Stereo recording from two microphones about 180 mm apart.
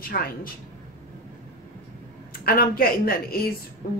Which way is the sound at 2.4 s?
55° left (ahead or behind).